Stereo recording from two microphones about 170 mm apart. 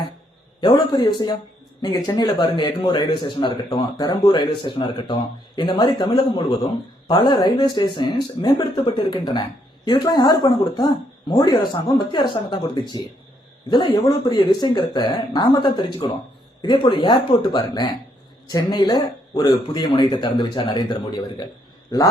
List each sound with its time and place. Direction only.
0.6 s speech: 30° left (ahead or behind)